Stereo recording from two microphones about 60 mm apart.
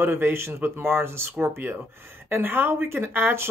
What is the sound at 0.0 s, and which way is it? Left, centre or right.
Speech, right.